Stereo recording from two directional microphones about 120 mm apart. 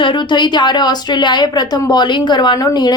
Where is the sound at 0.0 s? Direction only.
40° left (ahead or behind).